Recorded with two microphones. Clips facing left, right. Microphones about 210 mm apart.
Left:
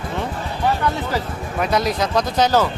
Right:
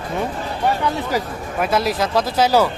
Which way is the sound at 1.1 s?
5° right (ahead or behind).